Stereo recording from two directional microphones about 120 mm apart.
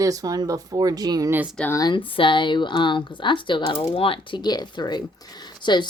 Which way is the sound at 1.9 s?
45° left (ahead or behind).